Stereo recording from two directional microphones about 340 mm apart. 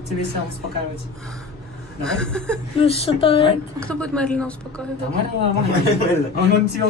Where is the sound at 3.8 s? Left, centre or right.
Centre.